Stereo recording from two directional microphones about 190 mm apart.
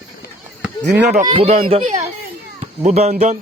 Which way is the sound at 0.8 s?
65° right (ahead or behind).